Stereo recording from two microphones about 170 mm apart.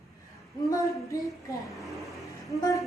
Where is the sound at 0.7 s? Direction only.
20° left (ahead or behind).